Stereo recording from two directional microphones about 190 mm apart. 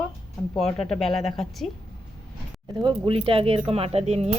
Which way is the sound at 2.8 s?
25° right (ahead or behind).